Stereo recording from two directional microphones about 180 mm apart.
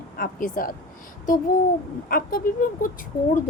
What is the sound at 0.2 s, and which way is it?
Speech, 50° left (ahead or behind).